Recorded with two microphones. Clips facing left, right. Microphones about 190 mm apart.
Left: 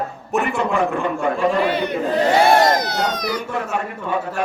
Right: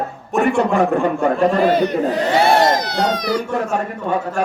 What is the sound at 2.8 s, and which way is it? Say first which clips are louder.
Speech: right 3 dB; 45° left (ahead or behind).